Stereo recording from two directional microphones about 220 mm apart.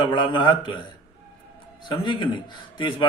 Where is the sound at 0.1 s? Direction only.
20° left (ahead or behind).